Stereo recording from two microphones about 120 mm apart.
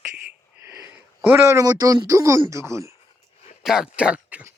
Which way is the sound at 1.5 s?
25° right (ahead or behind).